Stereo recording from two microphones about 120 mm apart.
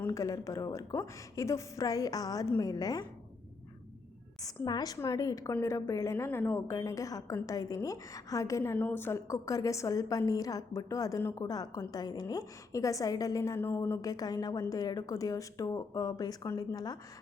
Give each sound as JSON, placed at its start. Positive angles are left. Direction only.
{"t": 0.0, "sound": "a woman's voice", "side_deg": 25}
{"t": 4.4, "sound": "a woman's voice", "side_deg": 35}
{"t": 6.7, "sound": "a woman's voice", "side_deg": 30}